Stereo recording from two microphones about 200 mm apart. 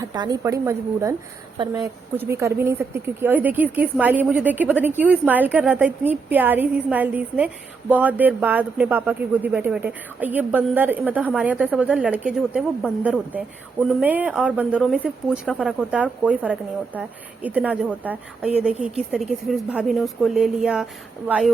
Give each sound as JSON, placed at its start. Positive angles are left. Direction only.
{"t": 0.0, "sound": "a woman's voice", "side_deg": -20}